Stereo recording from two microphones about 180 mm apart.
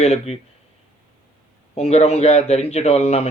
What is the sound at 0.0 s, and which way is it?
Speech, 35° left (ahead or behind).